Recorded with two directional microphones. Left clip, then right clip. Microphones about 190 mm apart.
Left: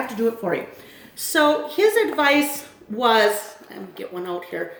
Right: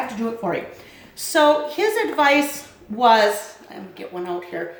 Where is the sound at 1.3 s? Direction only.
20° right (ahead or behind).